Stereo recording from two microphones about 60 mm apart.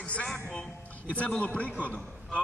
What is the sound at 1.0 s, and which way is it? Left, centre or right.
Speech, left.